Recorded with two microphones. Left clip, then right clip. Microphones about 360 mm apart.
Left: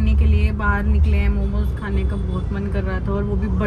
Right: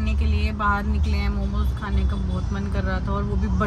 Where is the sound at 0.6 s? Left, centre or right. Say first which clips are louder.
Right 1 dB; left.